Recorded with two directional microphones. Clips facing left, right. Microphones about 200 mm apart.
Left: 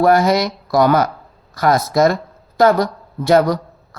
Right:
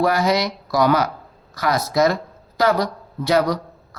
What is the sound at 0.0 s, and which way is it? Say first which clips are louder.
A woman's voice: left 5 dB; 50° left (ahead or behind).